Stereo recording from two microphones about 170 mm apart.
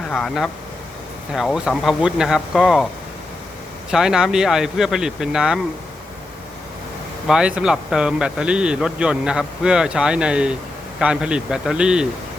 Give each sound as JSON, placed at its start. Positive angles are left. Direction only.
{"t": 0.1, "sound": "a man's voice", "side_deg": 0}
{"t": 3.9, "sound": "a man's voice", "side_deg": -5}
{"t": 7.3, "sound": "a man's voice", "side_deg": -5}